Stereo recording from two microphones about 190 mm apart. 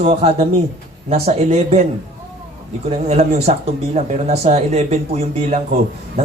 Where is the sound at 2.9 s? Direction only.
35° right (ahead or behind).